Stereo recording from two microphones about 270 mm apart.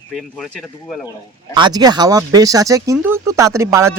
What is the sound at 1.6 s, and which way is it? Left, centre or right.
Speech, centre.